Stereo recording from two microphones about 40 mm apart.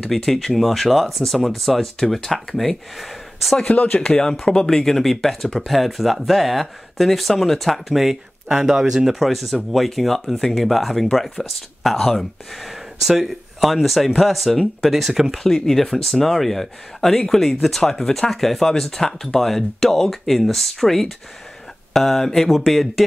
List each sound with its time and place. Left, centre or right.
0.0 s speech: centre
3.6 s speech: left
4.2 s speech: centre
12.6 s speech: centre